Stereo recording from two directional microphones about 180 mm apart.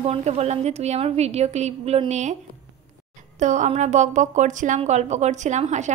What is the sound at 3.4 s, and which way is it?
A woman's voice, 40° right (ahead or behind).